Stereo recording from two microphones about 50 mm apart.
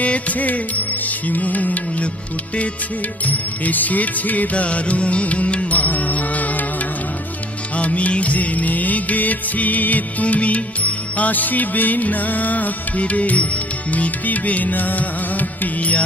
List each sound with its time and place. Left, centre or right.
0.0 s music: left
3.3 s music: left
7.7 s music: left